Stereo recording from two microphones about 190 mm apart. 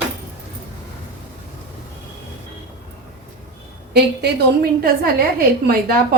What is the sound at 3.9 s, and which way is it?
A woman's voice, 55° right (ahead or behind).